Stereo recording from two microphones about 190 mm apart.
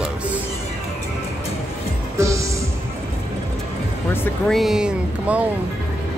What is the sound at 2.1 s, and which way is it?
Music, 15° right (ahead or behind).